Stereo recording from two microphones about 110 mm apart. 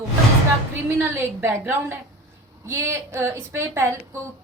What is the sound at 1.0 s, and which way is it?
A woman's voice, 25° right (ahead or behind).